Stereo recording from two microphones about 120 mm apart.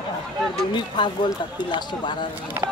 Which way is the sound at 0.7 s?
40° left (ahead or behind).